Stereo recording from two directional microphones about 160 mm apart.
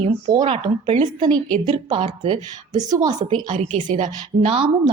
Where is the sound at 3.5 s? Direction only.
50° right (ahead or behind).